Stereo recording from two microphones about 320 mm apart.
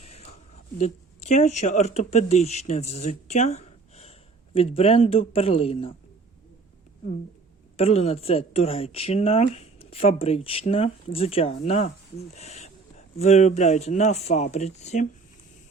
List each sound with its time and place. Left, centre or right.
0.0 s a sound: centre
0.8 s a man's voice: left
7.8 s speech: centre